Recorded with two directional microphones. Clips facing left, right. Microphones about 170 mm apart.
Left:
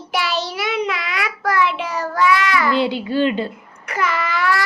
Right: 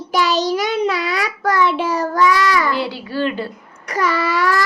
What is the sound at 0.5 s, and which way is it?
Child singing, 35° right (ahead or behind).